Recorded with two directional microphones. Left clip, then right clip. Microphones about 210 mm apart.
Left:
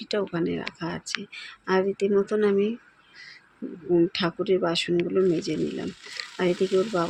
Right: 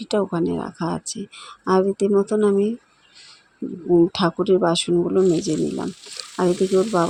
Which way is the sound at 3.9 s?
30° right (ahead or behind).